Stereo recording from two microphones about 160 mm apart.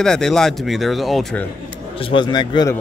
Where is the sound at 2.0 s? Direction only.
30° left (ahead or behind).